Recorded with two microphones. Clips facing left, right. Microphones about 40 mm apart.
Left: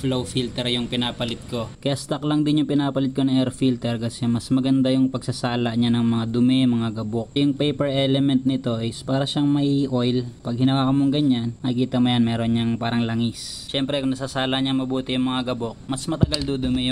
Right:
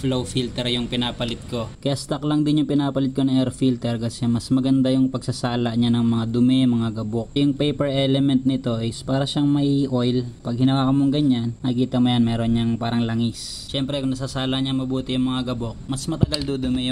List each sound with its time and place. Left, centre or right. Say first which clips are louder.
0.0 s speech: right 1 dB; centre
2.0 s a man's voice: even; centre
16.2 s speech: even; centre
16.5 s a man's voice: left 1 dB; centre